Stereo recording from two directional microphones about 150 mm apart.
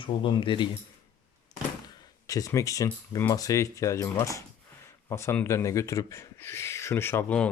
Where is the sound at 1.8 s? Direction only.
25° left (ahead or behind).